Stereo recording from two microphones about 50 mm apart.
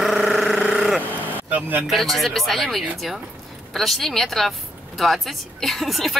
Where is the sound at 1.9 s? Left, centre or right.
Centre.